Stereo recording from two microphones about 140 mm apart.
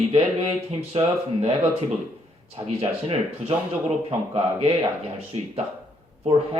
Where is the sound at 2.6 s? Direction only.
45° right (ahead or behind).